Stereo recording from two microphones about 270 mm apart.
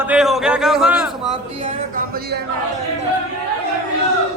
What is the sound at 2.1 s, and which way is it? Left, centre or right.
Speech, right.